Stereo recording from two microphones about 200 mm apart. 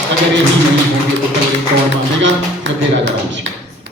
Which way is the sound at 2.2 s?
65° right (ahead or behind).